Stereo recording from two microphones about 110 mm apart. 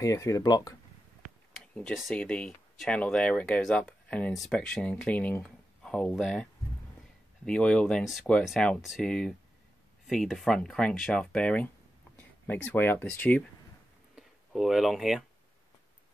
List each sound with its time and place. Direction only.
0.0 s speech: 30° left (ahead or behind)
2.1 s speech: 10° left (ahead or behind)
7.4 s speech: 10° left (ahead or behind)
14.1 s speech: centre (ahead or behind)